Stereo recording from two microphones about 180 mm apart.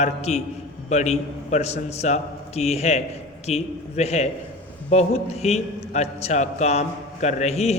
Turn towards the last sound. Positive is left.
turn(degrees=35)  # may be behind; listen again after turning